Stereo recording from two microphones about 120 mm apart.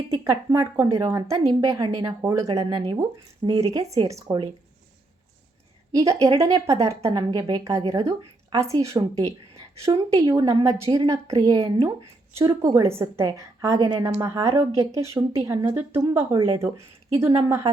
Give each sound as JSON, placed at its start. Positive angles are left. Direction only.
{"t": 0.1, "sound": "a woman's voice", "side_deg": -25}
{"t": 5.9, "sound": "a woman's voice", "side_deg": -25}
{"t": 7.6, "sound": "a woman's voice", "side_deg": -25}
{"t": 16.0, "sound": "a woman's voice", "side_deg": -35}
{"t": 16.6, "sound": "speech", "side_deg": -25}